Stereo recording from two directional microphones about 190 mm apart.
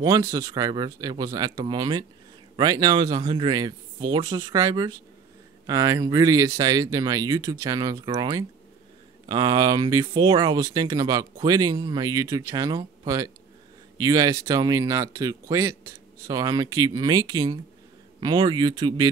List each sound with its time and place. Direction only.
0.0 s speech: 20° right (ahead or behind)